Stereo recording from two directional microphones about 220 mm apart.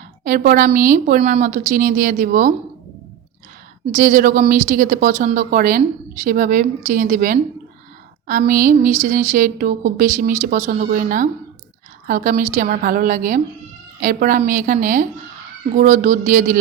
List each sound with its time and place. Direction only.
0.3 s speech: 40° right (ahead or behind)
3.9 s speech: 40° right (ahead or behind)